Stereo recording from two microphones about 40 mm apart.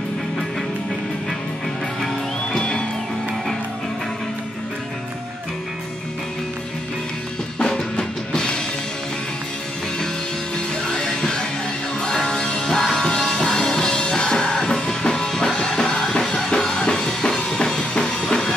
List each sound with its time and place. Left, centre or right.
2.5 s music: left
7.5 s drum kit: left
10.9 s music: centre
17.5 s drum kit: left